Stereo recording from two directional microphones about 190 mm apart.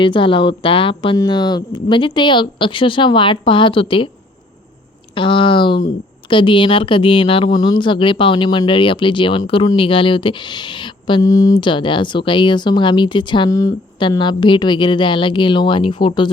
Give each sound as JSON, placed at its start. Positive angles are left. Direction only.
{"t": 0.0, "sound": "speech", "side_deg": 25}
{"t": 5.1, "sound": "speech", "side_deg": 25}